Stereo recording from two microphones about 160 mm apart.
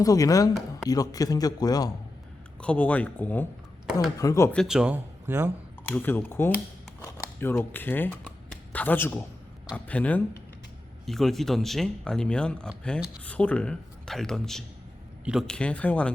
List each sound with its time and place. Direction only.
0.0 s speech: 20° left (ahead or behind)
2.6 s speech: 10° left (ahead or behind)
4.5 s speech: centre (ahead or behind)
5.9 s speech: 10° left (ahead or behind)